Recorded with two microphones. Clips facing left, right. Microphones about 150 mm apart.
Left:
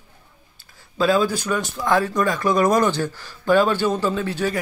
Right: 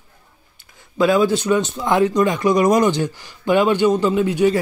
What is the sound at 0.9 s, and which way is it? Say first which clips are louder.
Speech: right 3 dB; 20° right (ahead or behind).